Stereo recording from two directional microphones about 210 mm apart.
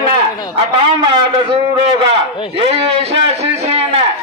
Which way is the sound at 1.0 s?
25° right (ahead or behind).